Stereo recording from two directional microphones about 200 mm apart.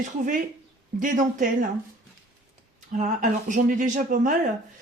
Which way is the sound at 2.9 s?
40° right (ahead or behind).